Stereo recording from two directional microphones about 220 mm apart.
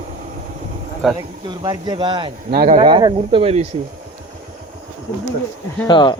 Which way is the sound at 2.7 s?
20° right (ahead or behind).